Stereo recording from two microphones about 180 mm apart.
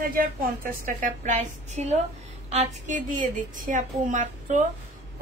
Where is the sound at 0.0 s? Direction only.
55° right (ahead or behind).